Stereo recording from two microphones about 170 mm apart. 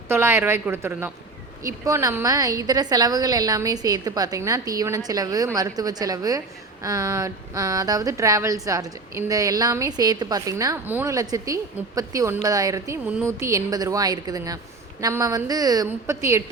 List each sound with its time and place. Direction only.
0.1 s a woman's voice: 15° right (ahead or behind)